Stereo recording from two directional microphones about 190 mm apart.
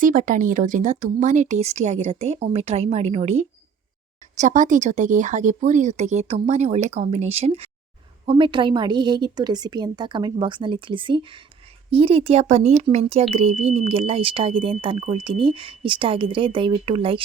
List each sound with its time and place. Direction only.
0.0 s speech: 45° right (ahead or behind); by 17.2 s 30° right (ahead or behind)